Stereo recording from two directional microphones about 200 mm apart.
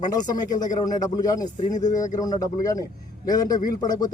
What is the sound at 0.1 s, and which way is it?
Speech, 20° left (ahead or behind).